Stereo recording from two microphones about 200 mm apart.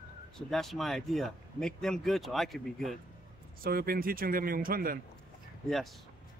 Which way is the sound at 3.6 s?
50° right (ahead or behind).